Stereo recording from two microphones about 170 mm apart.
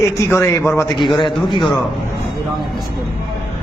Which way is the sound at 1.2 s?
30° left (ahead or behind).